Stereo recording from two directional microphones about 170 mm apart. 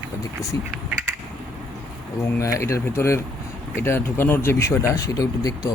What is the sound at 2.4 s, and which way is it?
Speech, 15° left (ahead or behind).